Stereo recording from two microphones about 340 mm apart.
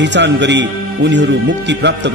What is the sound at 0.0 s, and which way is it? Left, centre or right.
Speech, right.